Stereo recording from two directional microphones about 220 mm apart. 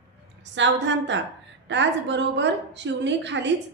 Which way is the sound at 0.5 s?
55° right (ahead or behind).